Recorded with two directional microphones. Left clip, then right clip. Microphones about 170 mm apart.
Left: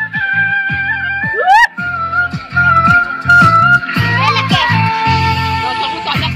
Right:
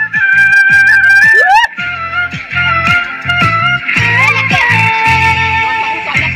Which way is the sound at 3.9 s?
75° left (ahead or behind).